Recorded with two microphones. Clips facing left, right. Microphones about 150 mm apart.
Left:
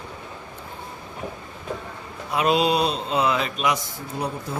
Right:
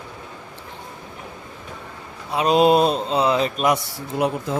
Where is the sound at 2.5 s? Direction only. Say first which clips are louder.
Right 8 dB; 50° right (ahead or behind).